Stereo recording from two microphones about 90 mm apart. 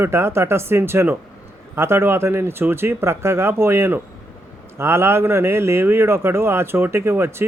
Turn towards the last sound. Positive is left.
turn(degrees=-25)  # may be behind; listen again after turning